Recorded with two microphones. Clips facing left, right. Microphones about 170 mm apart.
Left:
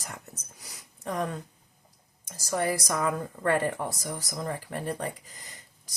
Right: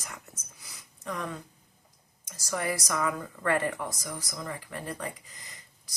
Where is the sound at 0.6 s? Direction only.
35° left (ahead or behind).